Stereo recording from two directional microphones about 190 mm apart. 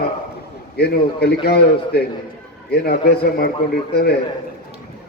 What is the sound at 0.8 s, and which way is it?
A man's voice, 60° left (ahead or behind).